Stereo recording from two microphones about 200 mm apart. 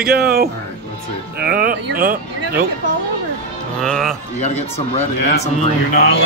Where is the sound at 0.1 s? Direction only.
50° right (ahead or behind).